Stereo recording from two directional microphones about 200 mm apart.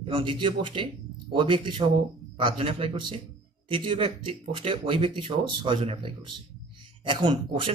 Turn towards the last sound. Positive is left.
turn(degrees=-25)  # may be behind; listen again after turning